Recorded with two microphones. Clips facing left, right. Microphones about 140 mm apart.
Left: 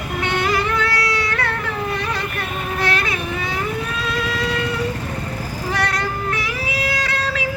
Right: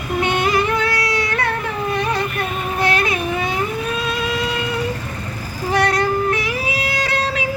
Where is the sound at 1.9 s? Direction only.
20° right (ahead or behind).